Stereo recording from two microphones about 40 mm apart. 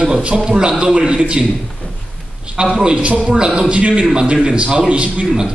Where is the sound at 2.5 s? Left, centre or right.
Right.